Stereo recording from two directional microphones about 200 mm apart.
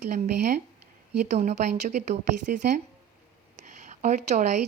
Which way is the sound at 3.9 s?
40° right (ahead or behind).